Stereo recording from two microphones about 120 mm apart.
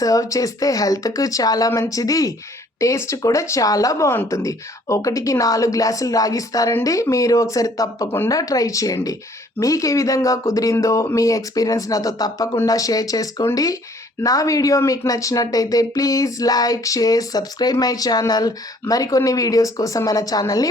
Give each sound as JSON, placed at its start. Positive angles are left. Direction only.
{"t": 0.0, "sound": "speech", "side_deg": 30}